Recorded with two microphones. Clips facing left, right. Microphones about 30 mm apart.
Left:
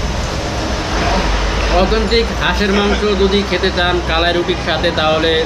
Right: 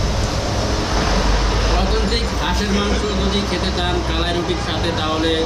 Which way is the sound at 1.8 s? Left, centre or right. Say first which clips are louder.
Left 7 dB; left.